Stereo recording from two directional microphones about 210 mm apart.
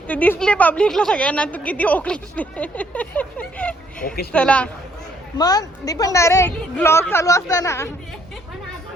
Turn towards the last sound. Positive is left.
turn(degrees=15)  # may be behind; listen again after turning